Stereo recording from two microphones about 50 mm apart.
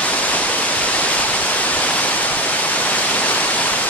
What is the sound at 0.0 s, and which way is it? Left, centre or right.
Pink noise, left.